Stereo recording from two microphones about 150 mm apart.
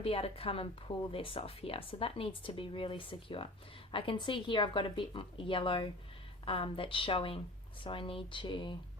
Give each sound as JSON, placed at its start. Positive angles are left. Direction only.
{"t": 0.0, "sound": "a woman's voice", "side_deg": 40}